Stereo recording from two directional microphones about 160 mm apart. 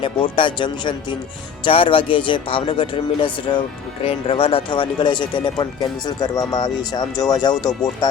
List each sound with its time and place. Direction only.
0.0 s speech: 30° left (ahead or behind)